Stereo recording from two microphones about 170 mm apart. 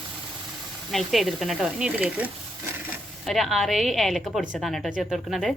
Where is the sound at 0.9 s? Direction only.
Centre (ahead or behind).